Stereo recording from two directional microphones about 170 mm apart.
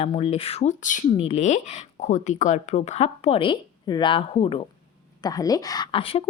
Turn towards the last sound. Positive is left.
turn(degrees=35)  # may be behind; listen again after turning